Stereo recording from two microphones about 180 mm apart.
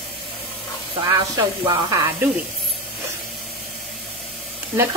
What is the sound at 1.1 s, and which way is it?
Speech, 20° right (ahead or behind).